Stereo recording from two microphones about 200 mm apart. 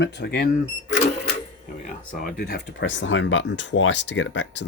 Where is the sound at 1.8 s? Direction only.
45° left (ahead or behind).